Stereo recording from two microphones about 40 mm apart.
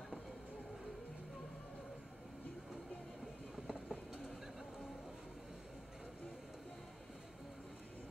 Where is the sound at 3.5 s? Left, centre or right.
Centre.